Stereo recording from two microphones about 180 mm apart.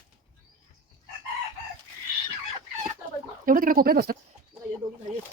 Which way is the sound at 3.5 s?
50° right (ahead or behind).